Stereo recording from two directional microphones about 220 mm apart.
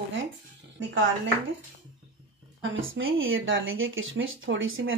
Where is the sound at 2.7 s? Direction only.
65° right (ahead or behind).